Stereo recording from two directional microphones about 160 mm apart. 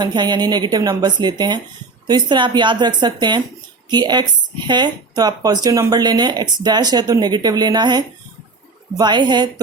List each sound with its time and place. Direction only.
0.0 s speech: 25° right (ahead or behind)